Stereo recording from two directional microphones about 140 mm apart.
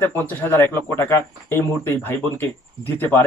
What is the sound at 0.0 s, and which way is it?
Speech, 15° left (ahead or behind).